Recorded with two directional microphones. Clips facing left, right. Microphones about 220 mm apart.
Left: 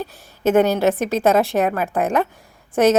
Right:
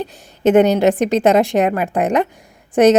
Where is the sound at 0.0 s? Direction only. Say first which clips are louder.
Right 4 dB; 15° right (ahead or behind).